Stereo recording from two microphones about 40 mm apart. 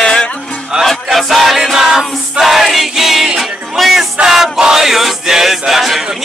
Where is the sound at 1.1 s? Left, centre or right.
Centre.